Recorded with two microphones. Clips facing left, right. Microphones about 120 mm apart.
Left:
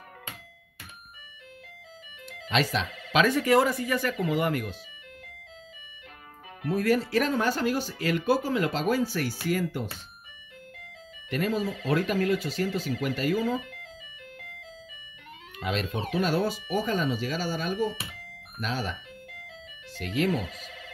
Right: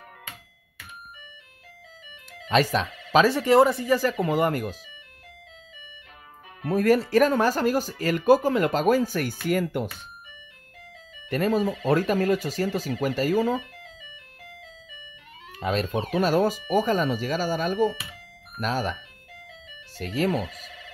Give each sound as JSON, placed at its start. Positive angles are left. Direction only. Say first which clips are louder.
{"t": 2.2, "sound": "speech", "louder": "right 5 dB", "side_deg": -40}
{"t": 6.6, "sound": "speech", "louder": "right 4 dB", "side_deg": -50}
{"t": 11.2, "sound": "speech", "louder": "right 5 dB", "side_deg": -40}
{"t": 15.5, "sound": "speech", "louder": "right 5 dB", "side_deg": -40}
{"t": 20.0, "sound": "speech", "louder": "right 2 dB", "side_deg": -40}